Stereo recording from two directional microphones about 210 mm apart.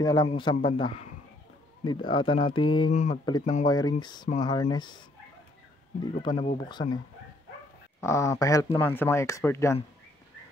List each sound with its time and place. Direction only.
0.0 s speech: 20° left (ahead or behind)
2.9 s speech: 35° left (ahead or behind)
3.3 s speech: 20° left (ahead or behind)
6.1 s speech: 25° left (ahead or behind)
8.0 s speech: 15° left (ahead or behind)